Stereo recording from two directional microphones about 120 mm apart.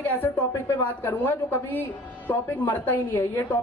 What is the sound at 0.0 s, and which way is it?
A woman's voice, 15° left (ahead or behind).